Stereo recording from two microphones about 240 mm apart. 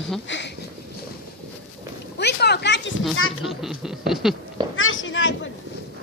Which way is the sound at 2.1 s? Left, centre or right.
Left.